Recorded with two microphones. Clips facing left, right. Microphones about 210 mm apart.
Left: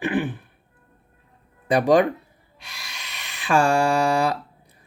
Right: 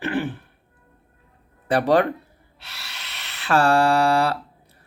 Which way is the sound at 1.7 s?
15° left (ahead or behind).